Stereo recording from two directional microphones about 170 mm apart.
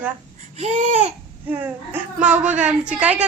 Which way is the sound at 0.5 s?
40° right (ahead or behind).